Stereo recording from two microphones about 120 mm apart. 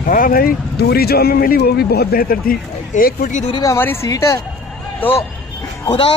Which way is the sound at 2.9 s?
90° left.